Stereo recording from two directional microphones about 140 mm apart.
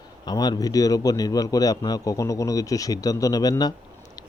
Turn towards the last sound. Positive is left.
turn(degrees=25)  # may be behind; listen again after turning